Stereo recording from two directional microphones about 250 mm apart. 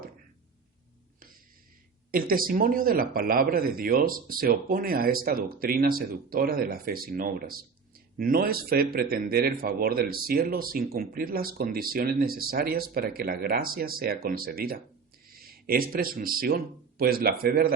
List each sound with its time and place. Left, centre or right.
2.1 s a man's voice: right